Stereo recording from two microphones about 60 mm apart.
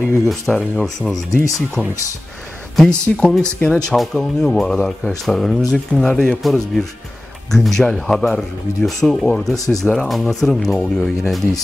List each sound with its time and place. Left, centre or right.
0.3 s speech: centre
1.8 s speech: right
2.7 s speech: centre
3.9 s speech: centre